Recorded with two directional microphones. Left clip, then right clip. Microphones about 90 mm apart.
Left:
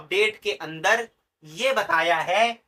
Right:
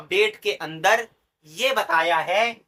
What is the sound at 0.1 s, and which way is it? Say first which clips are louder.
Speech: right 2 dB; 35° right (ahead or behind).